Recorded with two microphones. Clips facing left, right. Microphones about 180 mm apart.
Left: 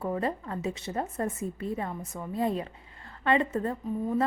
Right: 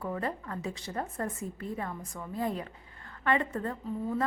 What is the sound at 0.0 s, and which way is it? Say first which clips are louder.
A woman's voice: left 4 dB; 25° left (ahead or behind).